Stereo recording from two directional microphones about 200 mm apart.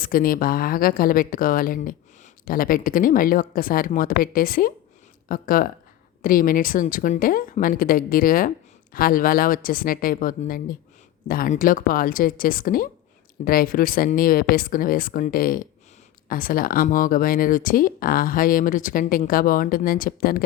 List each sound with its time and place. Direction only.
0.0 s a woman's voice: 45° left (ahead or behind)